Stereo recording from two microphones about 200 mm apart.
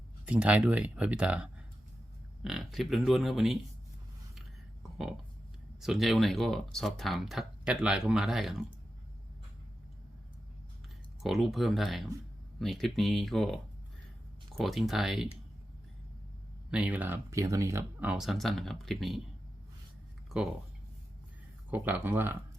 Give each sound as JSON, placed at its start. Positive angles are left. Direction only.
{"t": 0.3, "sound": "speech", "side_deg": -5}
{"t": 5.8, "sound": "speech", "side_deg": 0}
{"t": 11.2, "sound": "speech", "side_deg": 0}
{"t": 14.6, "sound": "speech", "side_deg": 0}
{"t": 16.7, "sound": "speech", "side_deg": -5}
{"t": 20.3, "sound": "speech", "side_deg": -5}
{"t": 21.7, "sound": "speech", "side_deg": -10}